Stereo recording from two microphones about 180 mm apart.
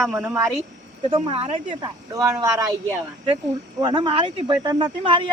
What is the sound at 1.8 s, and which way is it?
Speech, 20° right (ahead or behind).